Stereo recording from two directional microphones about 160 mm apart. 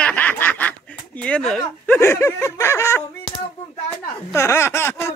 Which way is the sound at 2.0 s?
15° left (ahead or behind).